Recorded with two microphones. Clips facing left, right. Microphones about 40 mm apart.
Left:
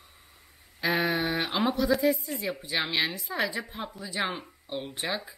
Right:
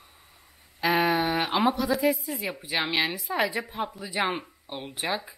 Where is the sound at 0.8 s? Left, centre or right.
Centre.